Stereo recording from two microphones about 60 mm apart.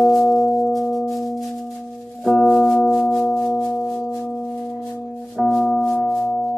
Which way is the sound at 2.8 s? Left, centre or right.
Centre.